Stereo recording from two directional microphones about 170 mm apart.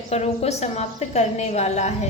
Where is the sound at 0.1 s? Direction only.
40° left (ahead or behind).